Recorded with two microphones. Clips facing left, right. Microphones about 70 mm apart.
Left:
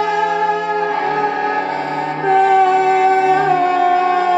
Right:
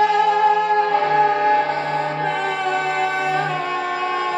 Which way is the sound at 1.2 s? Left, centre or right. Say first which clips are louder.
Right 1 dB; centre.